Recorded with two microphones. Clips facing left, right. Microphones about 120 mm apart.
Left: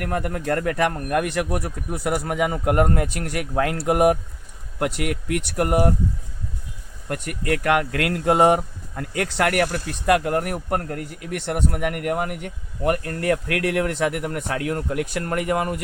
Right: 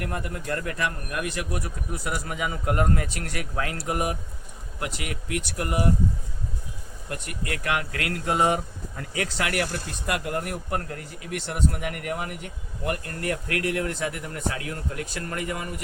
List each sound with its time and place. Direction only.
0.0 s a man's voice: 55° left (ahead or behind)
7.1 s a man's voice: 55° left (ahead or behind)